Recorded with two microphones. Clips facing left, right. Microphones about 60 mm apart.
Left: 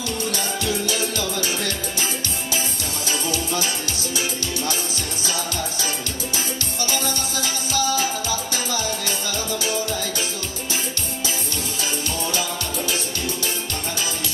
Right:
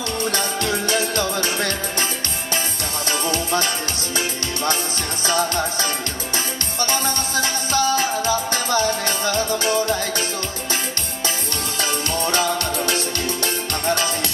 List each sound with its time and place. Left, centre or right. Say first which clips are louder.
0.3 s music: right 2 dB; right
3.1 s music: right 3 dB; right
5.2 s music: right 8 dB; right
11.8 s music: right 5 dB; right